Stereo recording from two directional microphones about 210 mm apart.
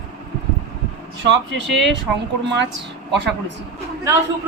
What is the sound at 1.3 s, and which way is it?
Speech, 60° right (ahead or behind).